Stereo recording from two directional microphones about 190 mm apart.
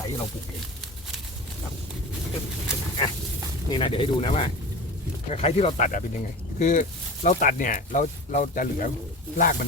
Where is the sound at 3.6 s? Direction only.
25° left (ahead or behind).